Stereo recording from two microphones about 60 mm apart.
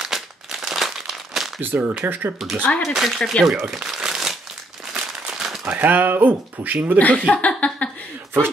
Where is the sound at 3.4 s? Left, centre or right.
Centre.